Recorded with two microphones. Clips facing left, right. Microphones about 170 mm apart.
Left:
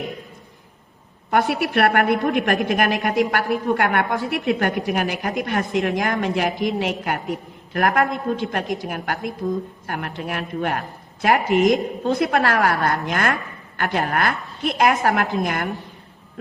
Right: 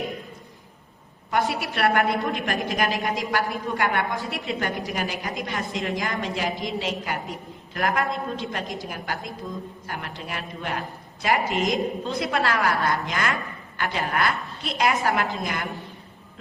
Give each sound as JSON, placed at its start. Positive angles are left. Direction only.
{"t": 1.3, "sound": "a woman's voice", "side_deg": 60}